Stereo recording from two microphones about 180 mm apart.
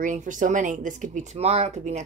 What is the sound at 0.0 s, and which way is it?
Speech, 45° right (ahead or behind).